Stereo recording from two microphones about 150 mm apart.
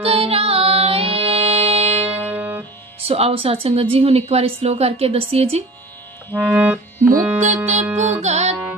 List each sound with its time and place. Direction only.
0.0 s music: 40° right (ahead or behind)
2.0 s music: 10° right (ahead or behind)
3.1 s a woman's voice: 40° right (ahead or behind)
6.3 s accordion: 10° right (ahead or behind)
7.3 s a woman's voice: 50° right (ahead or behind)
7.9 s music: 15° right (ahead or behind)
8.2 s music: 50° right (ahead or behind)